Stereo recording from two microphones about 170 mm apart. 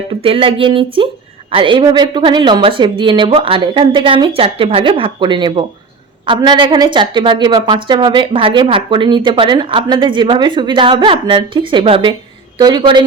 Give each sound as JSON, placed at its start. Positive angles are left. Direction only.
{"t": 0.1, "sound": "a woman's voice", "side_deg": -35}